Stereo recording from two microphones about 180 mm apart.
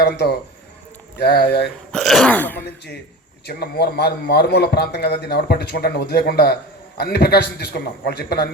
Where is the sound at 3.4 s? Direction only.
65° left (ahead or behind).